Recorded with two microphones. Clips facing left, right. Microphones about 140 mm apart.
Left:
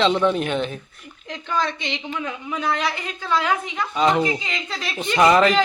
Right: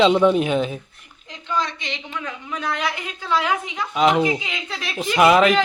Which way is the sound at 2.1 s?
5° left (ahead or behind).